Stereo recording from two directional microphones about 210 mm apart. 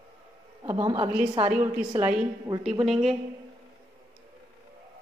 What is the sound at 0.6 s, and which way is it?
Speech, 20° right (ahead or behind).